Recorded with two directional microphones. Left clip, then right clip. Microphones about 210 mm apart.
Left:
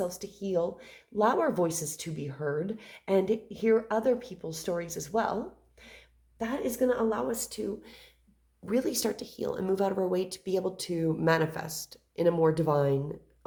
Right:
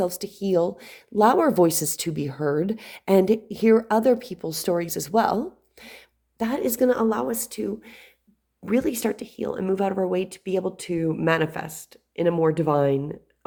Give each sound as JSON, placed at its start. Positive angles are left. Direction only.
{"t": 0.0, "sound": "speech", "side_deg": -45}
{"t": 9.1, "sound": "speech", "side_deg": -50}
{"t": 9.4, "sound": "speech", "side_deg": -25}